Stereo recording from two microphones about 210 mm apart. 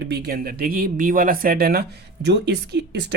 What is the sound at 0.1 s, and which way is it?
Speech, 50° right (ahead or behind).